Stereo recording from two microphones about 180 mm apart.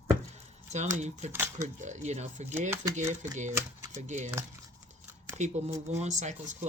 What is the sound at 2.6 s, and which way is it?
Speech, 10° right (ahead or behind).